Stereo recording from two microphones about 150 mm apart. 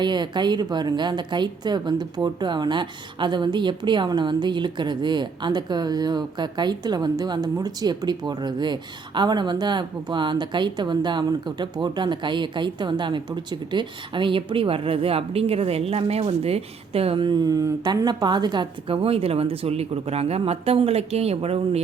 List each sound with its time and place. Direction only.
0.0 s a woman's voice: 30° right (ahead or behind)